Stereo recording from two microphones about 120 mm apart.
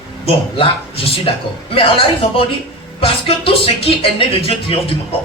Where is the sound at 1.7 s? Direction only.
50° left (ahead or behind).